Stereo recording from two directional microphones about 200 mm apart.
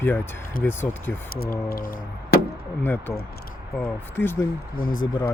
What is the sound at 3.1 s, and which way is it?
Speech, 50° left (ahead or behind).